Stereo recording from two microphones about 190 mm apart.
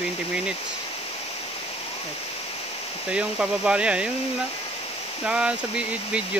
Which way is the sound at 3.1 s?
5° right (ahead or behind).